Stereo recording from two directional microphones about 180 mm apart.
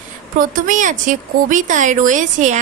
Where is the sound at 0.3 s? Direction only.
45° right (ahead or behind).